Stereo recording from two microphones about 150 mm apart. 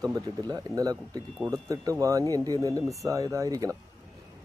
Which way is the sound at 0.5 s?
25° right (ahead or behind).